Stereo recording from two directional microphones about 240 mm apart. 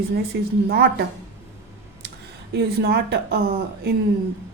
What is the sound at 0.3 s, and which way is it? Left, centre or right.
Speech, right.